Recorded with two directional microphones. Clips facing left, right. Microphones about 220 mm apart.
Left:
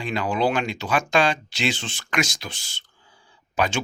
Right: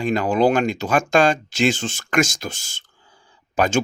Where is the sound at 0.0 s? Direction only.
45° right (ahead or behind).